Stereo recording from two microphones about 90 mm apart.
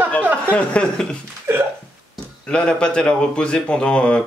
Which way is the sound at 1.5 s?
30° right (ahead or behind).